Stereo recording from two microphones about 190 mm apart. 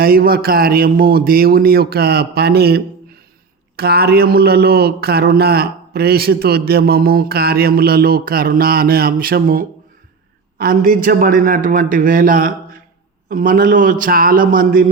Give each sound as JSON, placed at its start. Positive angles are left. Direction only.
{"t": 0.0, "sound": "a man's voice", "side_deg": -50}